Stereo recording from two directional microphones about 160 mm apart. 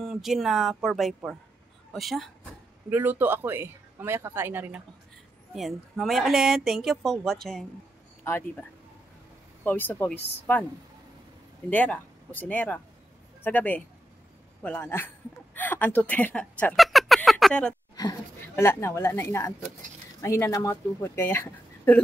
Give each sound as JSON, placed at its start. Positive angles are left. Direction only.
{"t": 0.0, "sound": "speech", "side_deg": 0}
{"t": 2.9, "sound": "speech", "side_deg": -10}
{"t": 5.5, "sound": "speech", "side_deg": 0}
{"t": 8.2, "sound": "speech", "side_deg": 15}
{"t": 9.7, "sound": "speech", "side_deg": 10}
{"t": 11.7, "sound": "speech", "side_deg": 10}
{"t": 16.7, "sound": "a sound", "side_deg": 0}
{"t": 18.6, "sound": "speech", "side_deg": 15}